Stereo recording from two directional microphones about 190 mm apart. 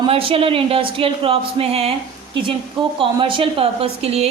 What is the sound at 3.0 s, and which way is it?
A woman's voice, 25° right (ahead or behind).